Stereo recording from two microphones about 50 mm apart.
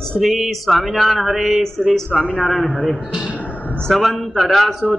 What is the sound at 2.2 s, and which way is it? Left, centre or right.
Speech, left.